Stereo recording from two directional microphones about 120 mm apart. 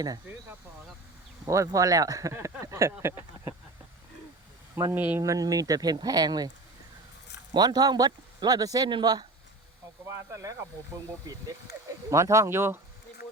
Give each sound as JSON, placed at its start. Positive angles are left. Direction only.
{"t": 1.5, "sound": "speech", "side_deg": -25}
{"t": 4.7, "sound": "speech", "side_deg": -20}
{"t": 5.2, "sound": "speech", "side_deg": -30}
{"t": 7.5, "sound": "speech", "side_deg": -35}
{"t": 10.3, "sound": "speech", "side_deg": -30}